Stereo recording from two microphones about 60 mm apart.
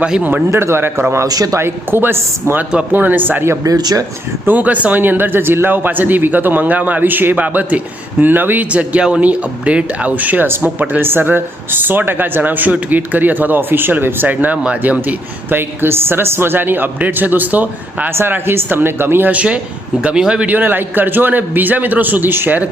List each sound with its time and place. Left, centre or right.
0.0 s speech: centre
0.5 s a man's voice: right
1.3 s speech: right
1.5 s speech: right
3.6 s speech: right
4.4 s speech: right
8.7 s speech: right
18.1 s speech: right
19.3 s speech: right
20.5 s speech: right